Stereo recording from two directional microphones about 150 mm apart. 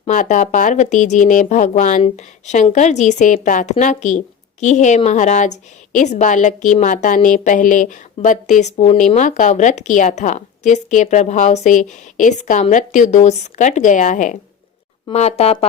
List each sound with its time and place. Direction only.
0.1 s a woman's voice: 55° left (ahead or behind)
2.0 s a woman's voice: 45° left (ahead or behind)
15.1 s a woman's voice: 45° left (ahead or behind)